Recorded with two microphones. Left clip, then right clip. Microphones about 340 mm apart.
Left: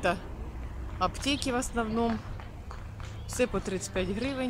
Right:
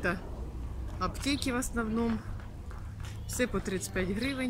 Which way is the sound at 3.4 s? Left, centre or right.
Centre.